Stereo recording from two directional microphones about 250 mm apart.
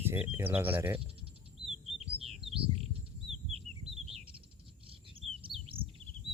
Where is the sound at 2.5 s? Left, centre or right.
Right.